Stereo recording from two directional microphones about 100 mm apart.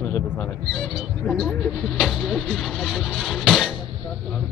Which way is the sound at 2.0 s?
5° right (ahead or behind).